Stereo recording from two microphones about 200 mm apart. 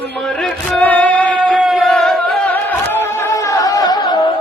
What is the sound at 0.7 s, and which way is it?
Music, 5° left (ahead or behind).